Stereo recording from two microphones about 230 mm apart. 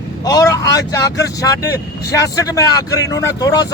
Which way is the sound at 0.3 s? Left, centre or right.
Centre.